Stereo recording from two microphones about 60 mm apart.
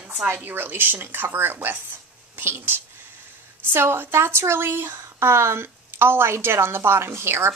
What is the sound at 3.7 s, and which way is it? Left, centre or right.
A woman's voice, right.